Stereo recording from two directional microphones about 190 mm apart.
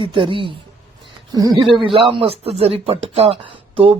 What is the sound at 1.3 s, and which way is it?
Speech, 20° right (ahead or behind).